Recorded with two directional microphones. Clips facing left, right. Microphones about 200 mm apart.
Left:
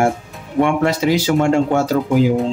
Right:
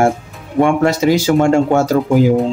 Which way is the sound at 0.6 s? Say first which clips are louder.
Right 3 dB; 45° right (ahead or behind).